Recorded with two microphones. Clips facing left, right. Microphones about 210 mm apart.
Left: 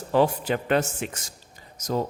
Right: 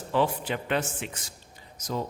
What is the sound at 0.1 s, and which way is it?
A man's voice, 40° left (ahead or behind).